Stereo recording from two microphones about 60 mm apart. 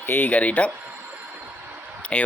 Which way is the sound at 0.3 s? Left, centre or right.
Left.